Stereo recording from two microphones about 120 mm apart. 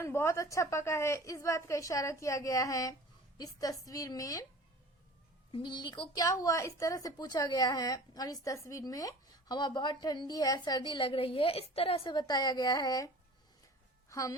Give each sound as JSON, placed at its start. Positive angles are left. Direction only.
{"t": 0.0, "sound": "a woman's voice", "side_deg": 20}
{"t": 5.5, "sound": "a woman's voice", "side_deg": 45}
{"t": 14.1, "sound": "speech", "side_deg": 30}